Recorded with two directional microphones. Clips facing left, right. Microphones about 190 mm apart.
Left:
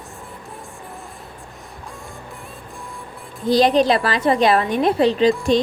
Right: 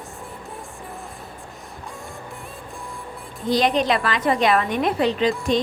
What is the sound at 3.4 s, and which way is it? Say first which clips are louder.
Speech: left 5 dB; 35° left (ahead or behind).